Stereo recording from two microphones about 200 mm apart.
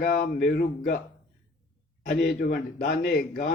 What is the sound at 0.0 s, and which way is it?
Speech, 45° left (ahead or behind).